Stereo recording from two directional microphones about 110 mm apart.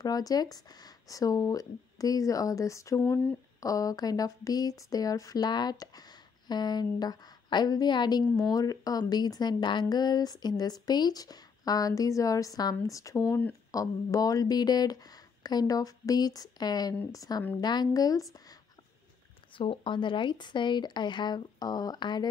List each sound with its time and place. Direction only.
0.0 s speech: 35° left (ahead or behind)
19.5 s speech: 50° left (ahead or behind)